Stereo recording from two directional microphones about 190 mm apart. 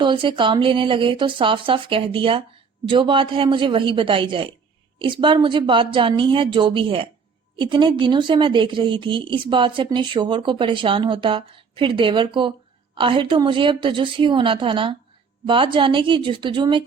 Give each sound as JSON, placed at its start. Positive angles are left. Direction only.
{"t": 0.0, "sound": "speech", "side_deg": -25}